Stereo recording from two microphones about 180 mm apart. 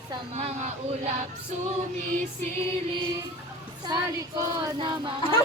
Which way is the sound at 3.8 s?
20° right (ahead or behind).